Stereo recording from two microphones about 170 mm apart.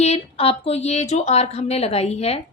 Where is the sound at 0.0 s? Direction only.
35° left (ahead or behind).